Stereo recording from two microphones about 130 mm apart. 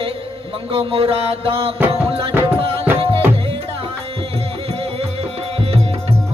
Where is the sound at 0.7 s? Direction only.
45° right (ahead or behind).